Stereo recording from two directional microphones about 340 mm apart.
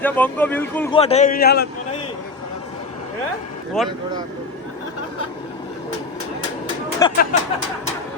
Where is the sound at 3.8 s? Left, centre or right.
Centre.